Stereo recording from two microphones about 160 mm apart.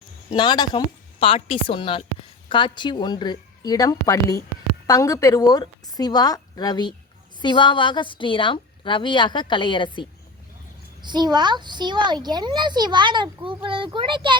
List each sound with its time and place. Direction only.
0.3 s a woman's voice: 25° left (ahead or behind)
11.0 s a child's voice: 25° right (ahead or behind)